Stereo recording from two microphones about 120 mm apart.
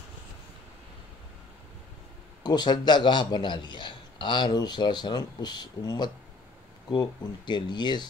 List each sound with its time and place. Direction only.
2.4 s a man's voice: 35° left (ahead or behind)